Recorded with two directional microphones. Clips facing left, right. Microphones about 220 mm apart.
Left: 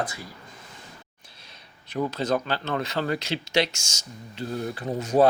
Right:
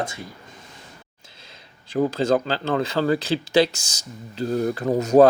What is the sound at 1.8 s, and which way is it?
Speech, 30° right (ahead or behind).